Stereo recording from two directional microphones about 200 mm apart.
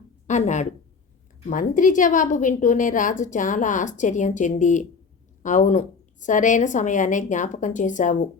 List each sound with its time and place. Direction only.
0.3 s a woman's voice: 35° left (ahead or behind)